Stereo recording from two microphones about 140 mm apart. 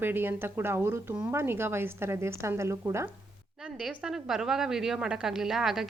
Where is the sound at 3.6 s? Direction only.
5° right (ahead or behind).